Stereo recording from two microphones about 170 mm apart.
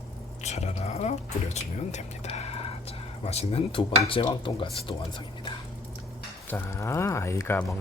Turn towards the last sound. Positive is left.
turn(degrees=15)  # may be behind; listen again after turning